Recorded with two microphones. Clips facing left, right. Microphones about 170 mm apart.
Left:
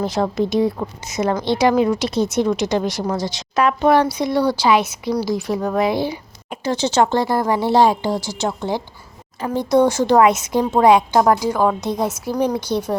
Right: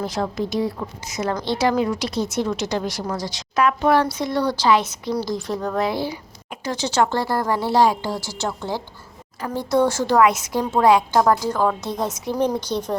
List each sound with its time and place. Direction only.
0.0 s a woman's voice: 25° left (ahead or behind)